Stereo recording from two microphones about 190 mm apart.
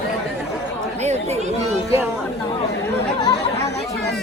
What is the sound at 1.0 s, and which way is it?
Chatter, 35° right (ahead or behind).